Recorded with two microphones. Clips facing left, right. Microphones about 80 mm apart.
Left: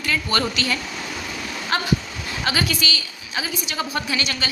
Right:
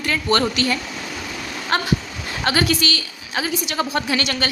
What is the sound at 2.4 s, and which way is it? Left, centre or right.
A woman's voice, right.